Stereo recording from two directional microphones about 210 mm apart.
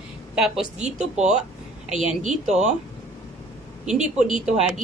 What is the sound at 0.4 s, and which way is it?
Speech, 5° right (ahead or behind).